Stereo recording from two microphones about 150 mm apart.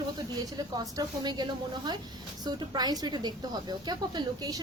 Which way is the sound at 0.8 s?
25° right (ahead or behind).